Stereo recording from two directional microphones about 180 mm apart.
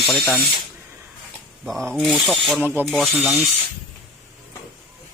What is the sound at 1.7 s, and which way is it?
Speech, 5° left (ahead or behind).